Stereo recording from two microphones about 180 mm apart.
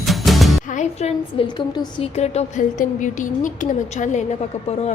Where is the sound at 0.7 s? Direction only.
40° left (ahead or behind).